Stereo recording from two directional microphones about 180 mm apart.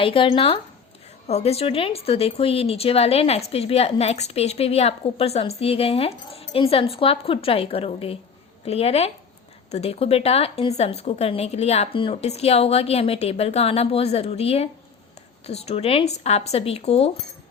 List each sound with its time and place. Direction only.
0.0 s a woman's voice: 30° left (ahead or behind)